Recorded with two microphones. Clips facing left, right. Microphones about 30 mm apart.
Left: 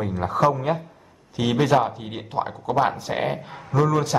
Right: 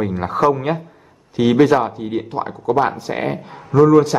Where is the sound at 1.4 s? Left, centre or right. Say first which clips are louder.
Right 6 dB; centre.